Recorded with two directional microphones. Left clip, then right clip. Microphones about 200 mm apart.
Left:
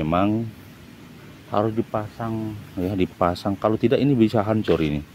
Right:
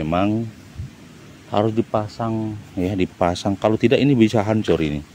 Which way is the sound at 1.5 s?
10° right (ahead or behind).